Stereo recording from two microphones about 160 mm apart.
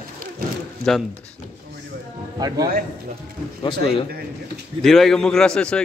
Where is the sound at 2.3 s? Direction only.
25° right (ahead or behind).